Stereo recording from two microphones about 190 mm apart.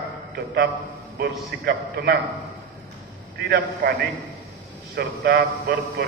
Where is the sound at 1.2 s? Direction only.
55° right (ahead or behind).